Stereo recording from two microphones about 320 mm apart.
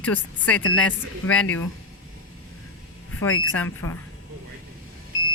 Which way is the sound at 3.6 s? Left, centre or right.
Centre.